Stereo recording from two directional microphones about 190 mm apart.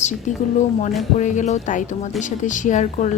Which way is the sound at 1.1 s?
40° left (ahead or behind).